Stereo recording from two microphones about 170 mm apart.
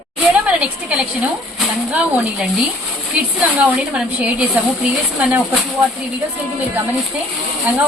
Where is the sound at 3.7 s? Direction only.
5° right (ahead or behind).